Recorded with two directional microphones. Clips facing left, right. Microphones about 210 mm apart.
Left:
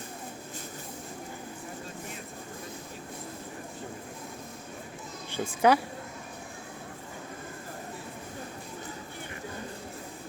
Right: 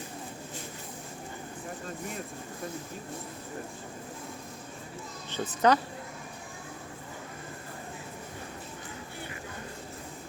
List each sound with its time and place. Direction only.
5.3 s speech: 10° left (ahead or behind)